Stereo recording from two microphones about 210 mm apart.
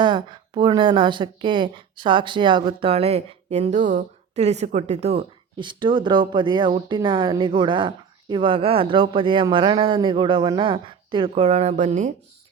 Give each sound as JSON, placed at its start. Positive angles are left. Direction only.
{"t": 0.0, "sound": "a woman's voice", "side_deg": -20}